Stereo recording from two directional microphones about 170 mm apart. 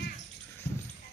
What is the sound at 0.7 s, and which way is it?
Dog, 15° left (ahead or behind).